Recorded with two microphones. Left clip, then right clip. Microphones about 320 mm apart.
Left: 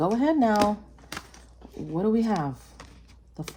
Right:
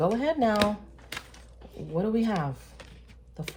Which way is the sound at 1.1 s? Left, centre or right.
Left.